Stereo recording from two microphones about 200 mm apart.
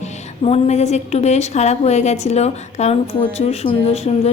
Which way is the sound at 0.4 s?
35° left (ahead or behind).